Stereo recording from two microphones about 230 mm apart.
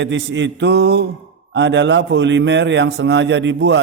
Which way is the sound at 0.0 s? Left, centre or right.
Right.